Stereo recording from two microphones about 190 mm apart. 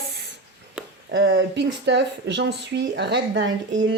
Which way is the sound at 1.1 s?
60° right (ahead or behind).